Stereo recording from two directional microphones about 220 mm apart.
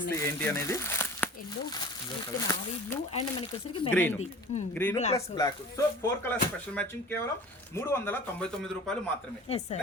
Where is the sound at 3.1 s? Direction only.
25° left (ahead or behind).